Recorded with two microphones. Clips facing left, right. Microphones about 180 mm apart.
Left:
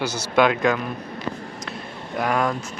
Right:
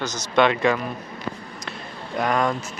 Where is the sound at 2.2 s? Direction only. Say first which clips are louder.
Even; 5° left (ahead or behind).